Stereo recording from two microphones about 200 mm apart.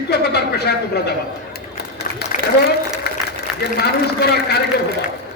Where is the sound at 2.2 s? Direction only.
55° left (ahead or behind).